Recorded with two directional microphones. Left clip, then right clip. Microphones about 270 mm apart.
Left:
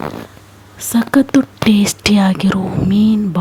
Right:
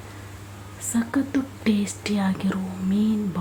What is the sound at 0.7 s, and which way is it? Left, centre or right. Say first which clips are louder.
Speech: left 12 dB; left.